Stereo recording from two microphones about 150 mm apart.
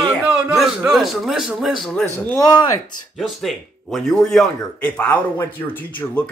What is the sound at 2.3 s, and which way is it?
Speech, 25° left (ahead or behind).